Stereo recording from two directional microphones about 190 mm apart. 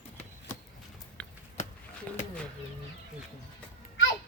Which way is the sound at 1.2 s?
5° left (ahead or behind).